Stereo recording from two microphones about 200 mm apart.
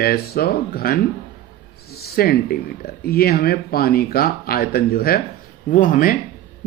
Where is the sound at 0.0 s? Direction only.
50° left (ahead or behind).